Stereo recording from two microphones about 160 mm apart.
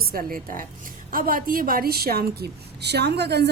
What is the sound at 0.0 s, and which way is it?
A woman's voice, 70° right (ahead or behind).